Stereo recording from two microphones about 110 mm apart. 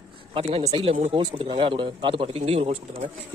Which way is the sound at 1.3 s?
50° right (ahead or behind).